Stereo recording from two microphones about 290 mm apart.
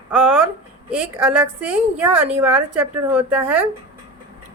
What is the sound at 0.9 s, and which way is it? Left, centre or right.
Speech, centre.